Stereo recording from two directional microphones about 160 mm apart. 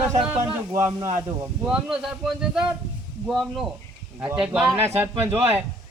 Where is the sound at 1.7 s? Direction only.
5° right (ahead or behind).